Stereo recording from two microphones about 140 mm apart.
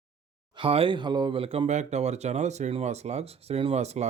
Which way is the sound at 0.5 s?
40° right (ahead or behind).